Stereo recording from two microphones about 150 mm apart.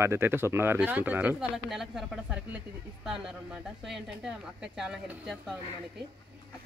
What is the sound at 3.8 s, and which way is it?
Speech, centre (ahead or behind).